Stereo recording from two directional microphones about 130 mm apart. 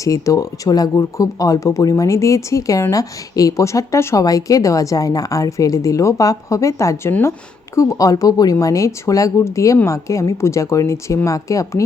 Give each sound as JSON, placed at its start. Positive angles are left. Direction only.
{"t": 0.0, "sound": "speech", "side_deg": 25}